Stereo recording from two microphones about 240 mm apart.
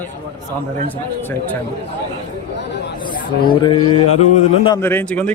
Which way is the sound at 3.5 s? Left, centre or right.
Centre.